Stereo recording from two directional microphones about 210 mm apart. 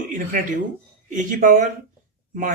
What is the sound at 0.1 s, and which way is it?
Speech, 40° right (ahead or behind).